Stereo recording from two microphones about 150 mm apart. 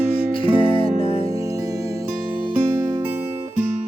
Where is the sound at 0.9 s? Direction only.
40° left (ahead or behind).